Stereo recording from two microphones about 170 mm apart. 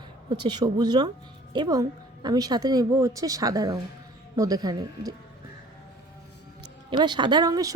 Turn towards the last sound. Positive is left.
turn(degrees=-20)  # may be behind; listen again after turning